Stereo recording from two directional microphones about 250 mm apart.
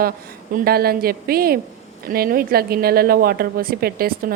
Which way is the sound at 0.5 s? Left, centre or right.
Right.